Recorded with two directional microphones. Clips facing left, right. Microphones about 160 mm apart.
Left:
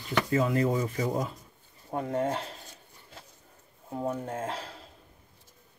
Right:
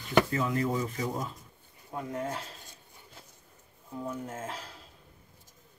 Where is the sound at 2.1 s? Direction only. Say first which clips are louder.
Left 6 dB; 30° left (ahead or behind).